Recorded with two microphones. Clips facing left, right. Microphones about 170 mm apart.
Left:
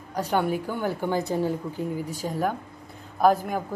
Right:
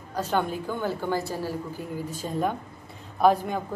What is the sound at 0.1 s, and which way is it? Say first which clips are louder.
A woman's voice: left 2 dB; 15° left (ahead or behind).